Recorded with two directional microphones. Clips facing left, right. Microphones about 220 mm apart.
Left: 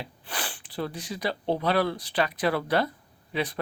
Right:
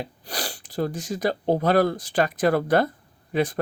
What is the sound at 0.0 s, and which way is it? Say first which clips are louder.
Speech: right 4 dB; 40° right (ahead or behind).